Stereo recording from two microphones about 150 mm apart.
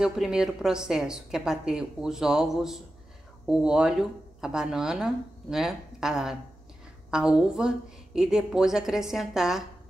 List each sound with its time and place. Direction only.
0.0 s speech: 5° right (ahead or behind)